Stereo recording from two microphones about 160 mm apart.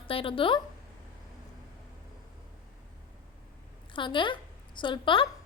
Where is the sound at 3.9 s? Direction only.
30° left (ahead or behind).